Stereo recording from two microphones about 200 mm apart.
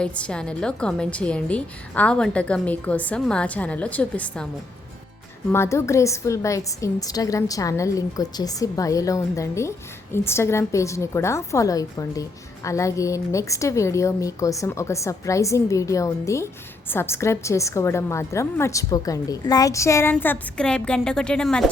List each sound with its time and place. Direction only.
0.0 s a woman's voice: 5° left (ahead or behind)
5.5 s a woman's voice: 15° left (ahead or behind)